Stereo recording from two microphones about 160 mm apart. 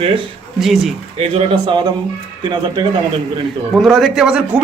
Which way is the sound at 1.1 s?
30° right (ahead or behind).